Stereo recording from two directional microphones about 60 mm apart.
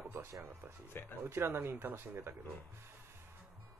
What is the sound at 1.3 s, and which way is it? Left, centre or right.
Speech, right.